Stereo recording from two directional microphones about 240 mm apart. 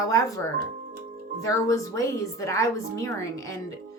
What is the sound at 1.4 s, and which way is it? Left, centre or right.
A woman's voice, centre.